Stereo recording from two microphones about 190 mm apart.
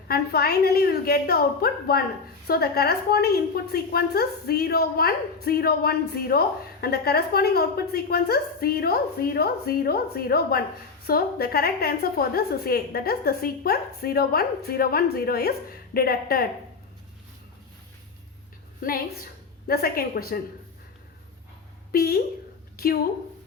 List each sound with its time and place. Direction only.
0.1 s a woman's voice: 55° left (ahead or behind)
18.8 s a woman's voice: 50° left (ahead or behind)
21.9 s a woman's voice: 55° left (ahead or behind)